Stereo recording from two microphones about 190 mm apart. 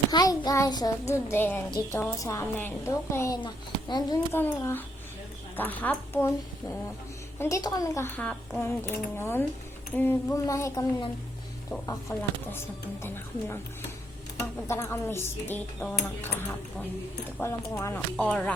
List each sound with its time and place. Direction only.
0.1 s a woman's voice: 20° left (ahead or behind)
14.7 s a woman's voice: 15° left (ahead or behind)
17.4 s a woman's voice: 15° left (ahead or behind)